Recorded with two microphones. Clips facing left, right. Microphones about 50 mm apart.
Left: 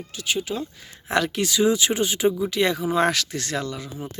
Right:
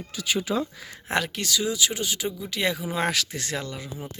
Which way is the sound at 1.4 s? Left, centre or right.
Left.